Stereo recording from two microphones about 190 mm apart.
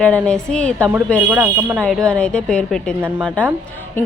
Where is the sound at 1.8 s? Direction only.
5° left (ahead or behind).